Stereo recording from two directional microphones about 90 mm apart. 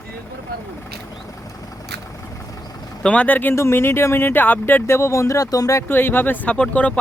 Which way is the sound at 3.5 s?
30° left (ahead or behind).